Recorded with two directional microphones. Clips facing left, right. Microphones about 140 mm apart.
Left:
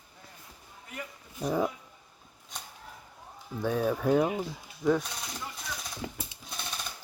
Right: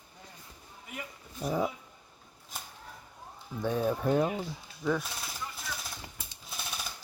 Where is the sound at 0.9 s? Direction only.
5° right (ahead or behind).